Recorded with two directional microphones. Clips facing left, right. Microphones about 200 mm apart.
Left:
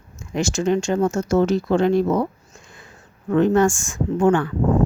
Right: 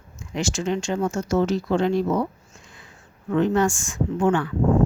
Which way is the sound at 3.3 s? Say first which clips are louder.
Left 4 dB; 50° left (ahead or behind).